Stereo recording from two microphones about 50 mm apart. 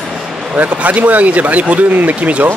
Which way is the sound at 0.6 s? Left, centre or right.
Right.